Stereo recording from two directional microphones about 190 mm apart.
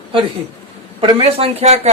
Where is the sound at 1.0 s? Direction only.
30° right (ahead or behind).